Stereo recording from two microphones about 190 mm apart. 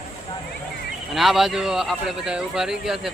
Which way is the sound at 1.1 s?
Centre (ahead or behind).